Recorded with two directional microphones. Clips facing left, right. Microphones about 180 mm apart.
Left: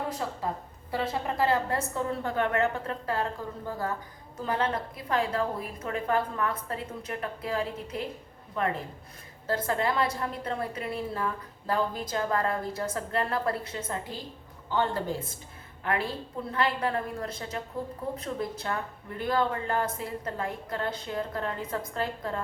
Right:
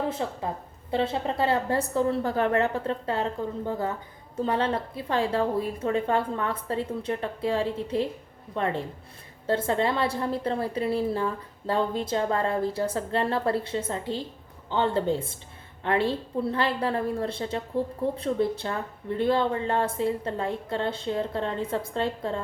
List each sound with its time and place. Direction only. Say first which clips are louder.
0.2 s a woman's voice: right 2 dB; 25° right (ahead or behind)